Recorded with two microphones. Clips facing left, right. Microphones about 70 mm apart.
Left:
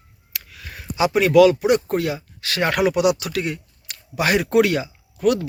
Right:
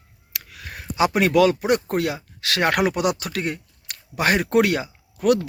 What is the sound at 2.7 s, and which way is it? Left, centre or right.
Speech, right.